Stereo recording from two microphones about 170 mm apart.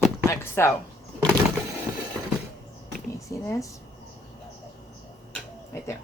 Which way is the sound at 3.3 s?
20° left (ahead or behind).